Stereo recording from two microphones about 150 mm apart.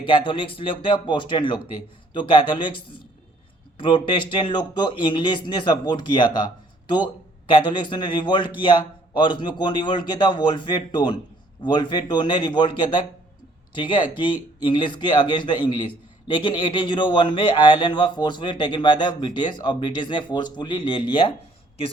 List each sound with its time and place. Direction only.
0.0 s a man's voice: 35° left (ahead or behind)